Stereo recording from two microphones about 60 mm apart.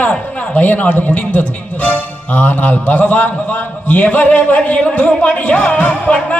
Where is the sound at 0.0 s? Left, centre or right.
Left.